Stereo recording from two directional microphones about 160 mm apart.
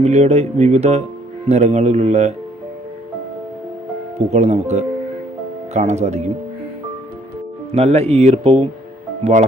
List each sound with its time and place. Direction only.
0.0 s speech: 40° right (ahead or behind)
4.3 s speech: 40° right (ahead or behind)
7.7 s speech: 40° right (ahead or behind)